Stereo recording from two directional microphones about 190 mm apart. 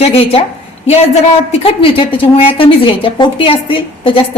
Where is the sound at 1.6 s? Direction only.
30° left (ahead or behind).